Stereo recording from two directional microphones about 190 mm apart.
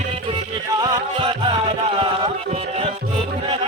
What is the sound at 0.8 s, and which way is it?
Music, 25° right (ahead or behind).